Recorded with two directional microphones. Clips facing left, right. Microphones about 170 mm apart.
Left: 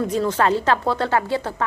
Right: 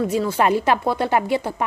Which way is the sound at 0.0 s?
10° right (ahead or behind).